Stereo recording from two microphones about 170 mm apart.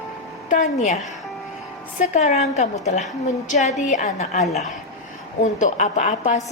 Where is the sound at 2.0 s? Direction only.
40° left (ahead or behind).